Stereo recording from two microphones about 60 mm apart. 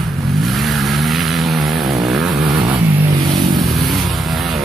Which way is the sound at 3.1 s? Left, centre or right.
Right.